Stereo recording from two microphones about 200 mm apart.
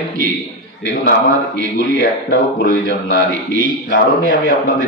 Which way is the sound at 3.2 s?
45° right (ahead or behind).